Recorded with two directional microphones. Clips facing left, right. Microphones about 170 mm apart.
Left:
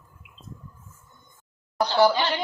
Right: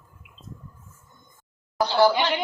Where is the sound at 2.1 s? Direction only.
15° right (ahead or behind).